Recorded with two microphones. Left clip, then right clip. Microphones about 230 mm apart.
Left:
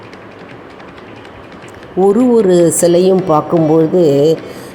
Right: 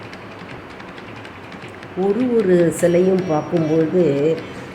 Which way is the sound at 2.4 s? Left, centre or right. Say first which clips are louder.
Left 6 dB; left.